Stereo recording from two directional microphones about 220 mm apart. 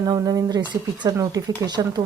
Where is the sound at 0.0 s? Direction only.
15° right (ahead or behind).